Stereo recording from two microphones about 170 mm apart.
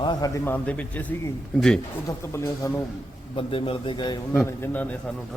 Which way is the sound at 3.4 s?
30° left (ahead or behind).